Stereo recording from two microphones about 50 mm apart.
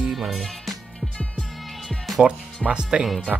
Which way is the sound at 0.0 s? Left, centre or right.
Centre.